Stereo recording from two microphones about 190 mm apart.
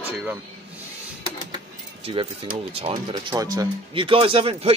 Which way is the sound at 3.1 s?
20° right (ahead or behind).